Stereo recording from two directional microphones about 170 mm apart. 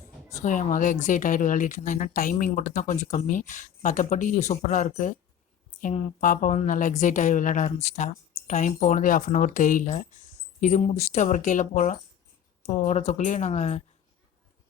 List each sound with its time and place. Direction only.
0.3 s a woman's voice: 45° left (ahead or behind)